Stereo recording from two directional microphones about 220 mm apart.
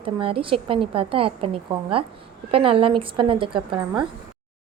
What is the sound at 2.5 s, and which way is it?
A woman's voice, 25° right (ahead or behind).